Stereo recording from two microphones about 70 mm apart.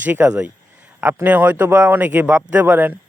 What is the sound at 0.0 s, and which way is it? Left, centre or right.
Speech, right.